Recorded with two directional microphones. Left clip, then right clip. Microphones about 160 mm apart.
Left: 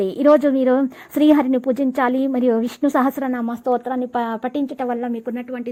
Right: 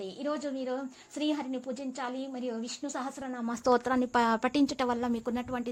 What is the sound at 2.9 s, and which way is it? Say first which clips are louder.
Speech: left 18 dB; 40° left (ahead or behind).